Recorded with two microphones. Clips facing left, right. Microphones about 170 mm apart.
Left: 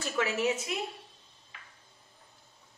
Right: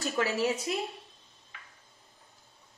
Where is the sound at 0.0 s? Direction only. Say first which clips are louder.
Right 1 dB; 35° right (ahead or behind).